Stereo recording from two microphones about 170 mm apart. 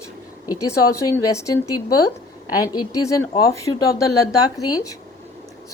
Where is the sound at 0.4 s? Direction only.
20° left (ahead or behind).